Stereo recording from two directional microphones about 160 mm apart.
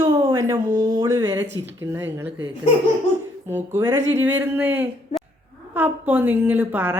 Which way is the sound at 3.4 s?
15° right (ahead or behind).